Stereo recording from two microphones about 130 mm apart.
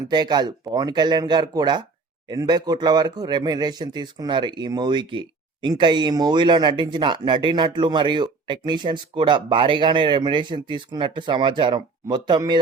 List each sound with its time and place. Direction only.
0.1 s a man's voice: 35° right (ahead or behind)